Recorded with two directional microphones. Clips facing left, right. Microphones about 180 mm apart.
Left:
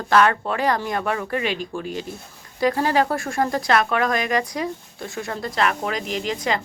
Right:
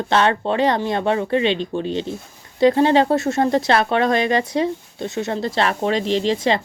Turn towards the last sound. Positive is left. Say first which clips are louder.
# right 6 dB
turn(degrees=-25)  # may be behind; listen again after turning